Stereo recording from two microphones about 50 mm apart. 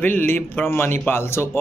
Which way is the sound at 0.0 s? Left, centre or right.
Left.